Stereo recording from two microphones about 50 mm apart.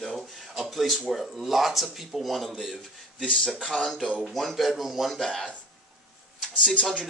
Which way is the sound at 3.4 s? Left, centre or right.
Centre.